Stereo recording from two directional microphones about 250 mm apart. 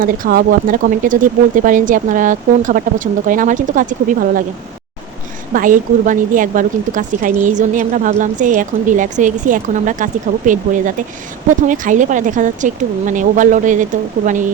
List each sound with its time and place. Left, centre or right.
0.0 s speech: right
5.5 s speech: right